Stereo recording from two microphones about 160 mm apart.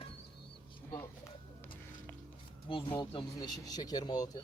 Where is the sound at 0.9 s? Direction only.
15° left (ahead or behind).